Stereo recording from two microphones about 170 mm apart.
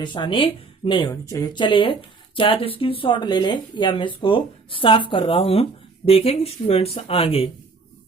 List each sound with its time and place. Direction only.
0.0 s speech: 30° left (ahead or behind)